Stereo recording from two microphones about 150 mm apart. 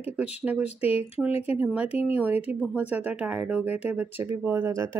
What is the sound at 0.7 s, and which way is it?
Speech, 40° left (ahead or behind).